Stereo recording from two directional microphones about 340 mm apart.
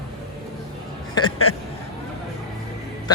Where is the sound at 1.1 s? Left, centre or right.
Centre.